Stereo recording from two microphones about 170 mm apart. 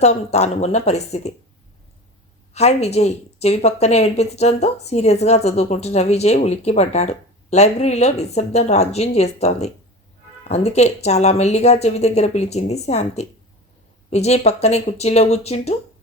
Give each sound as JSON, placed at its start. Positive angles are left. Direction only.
{"t": 0.0, "sound": "speech", "side_deg": 40}
{"t": 2.5, "sound": "speech", "side_deg": 40}